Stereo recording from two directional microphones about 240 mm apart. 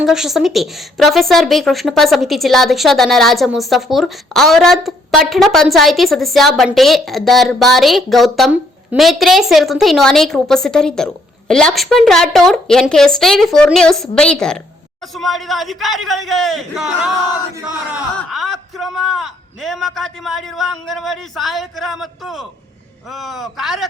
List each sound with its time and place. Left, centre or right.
0.0 s speech: centre
18.2 s speech: centre